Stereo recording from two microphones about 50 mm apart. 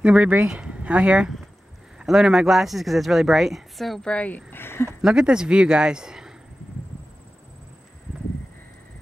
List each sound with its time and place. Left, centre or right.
0.0 s speech: right
2.0 s a woman's voice: centre
4.0 s speech: left
4.5 s speech: left
5.0 s speech: centre